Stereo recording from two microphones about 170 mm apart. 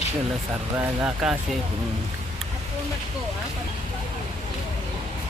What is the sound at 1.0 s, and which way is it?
Speech, 5° right (ahead or behind).